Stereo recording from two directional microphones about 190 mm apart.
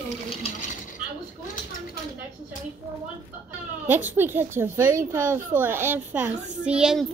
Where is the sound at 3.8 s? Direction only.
10° right (ahead or behind).